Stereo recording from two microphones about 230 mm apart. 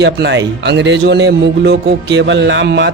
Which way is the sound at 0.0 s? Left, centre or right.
Right.